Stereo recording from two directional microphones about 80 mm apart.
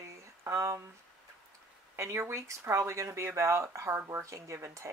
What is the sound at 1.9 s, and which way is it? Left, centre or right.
Speech, right.